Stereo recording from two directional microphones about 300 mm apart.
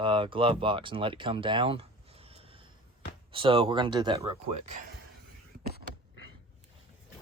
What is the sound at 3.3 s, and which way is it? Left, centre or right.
Speech, centre.